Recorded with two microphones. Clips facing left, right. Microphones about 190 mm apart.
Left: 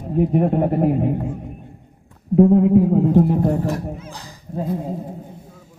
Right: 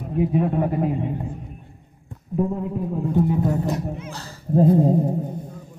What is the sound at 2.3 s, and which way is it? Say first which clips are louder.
Speech: left 12 dB; 65° left (ahead or behind).